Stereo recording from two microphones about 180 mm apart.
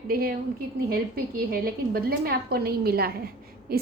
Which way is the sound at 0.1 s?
55° right (ahead or behind).